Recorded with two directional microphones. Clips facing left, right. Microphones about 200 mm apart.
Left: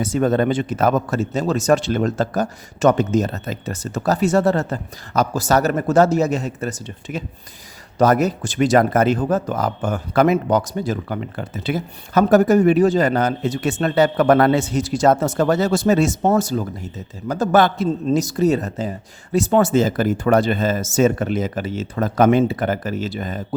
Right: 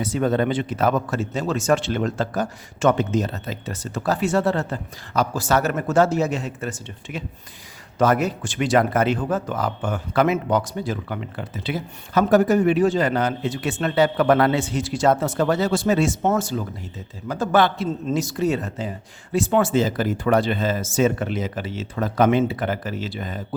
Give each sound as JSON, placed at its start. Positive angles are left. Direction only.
{"t": 0.0, "sound": "speech", "side_deg": 45}